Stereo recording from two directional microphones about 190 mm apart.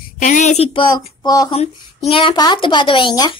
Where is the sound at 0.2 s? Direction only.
40° left (ahead or behind).